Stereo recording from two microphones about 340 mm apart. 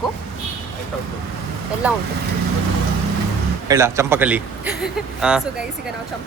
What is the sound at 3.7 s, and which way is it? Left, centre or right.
Speech, centre.